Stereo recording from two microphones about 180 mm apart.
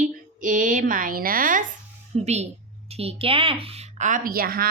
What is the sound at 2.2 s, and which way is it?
A woman's voice, 35° right (ahead or behind).